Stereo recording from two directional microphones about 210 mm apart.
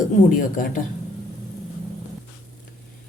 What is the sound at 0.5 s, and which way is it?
Speech, 40° left (ahead or behind).